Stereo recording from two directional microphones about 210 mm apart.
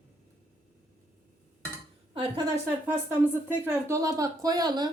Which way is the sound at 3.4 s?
10° right (ahead or behind).